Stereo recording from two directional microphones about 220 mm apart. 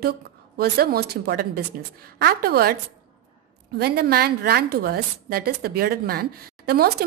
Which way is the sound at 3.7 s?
45° right (ahead or behind).